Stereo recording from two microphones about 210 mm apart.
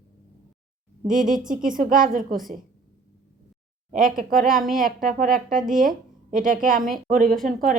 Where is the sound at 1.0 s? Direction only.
40° right (ahead or behind).